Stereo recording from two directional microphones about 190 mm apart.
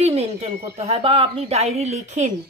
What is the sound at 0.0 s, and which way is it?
A woman's voice, 35° right (ahead or behind).